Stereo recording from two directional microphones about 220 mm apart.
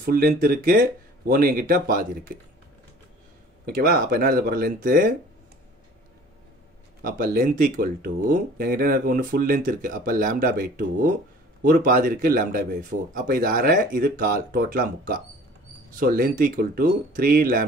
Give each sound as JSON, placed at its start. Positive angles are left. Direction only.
{"t": 0.0, "sound": "speech", "side_deg": -45}
{"t": 3.6, "sound": "speech", "side_deg": -45}
{"t": 7.0, "sound": "speech", "side_deg": -40}